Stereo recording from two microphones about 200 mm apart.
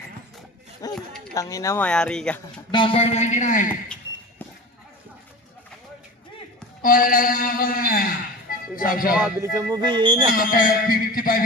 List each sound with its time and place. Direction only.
0.8 s speech: 20° left (ahead or behind)
2.7 s speech: 25° left (ahead or behind)
6.8 s speech: 45° left (ahead or behind)
9.4 s speech: 15° right (ahead or behind)
10.2 s a man's voice: 45° left (ahead or behind)